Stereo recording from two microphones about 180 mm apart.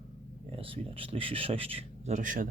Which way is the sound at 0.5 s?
30° right (ahead or behind).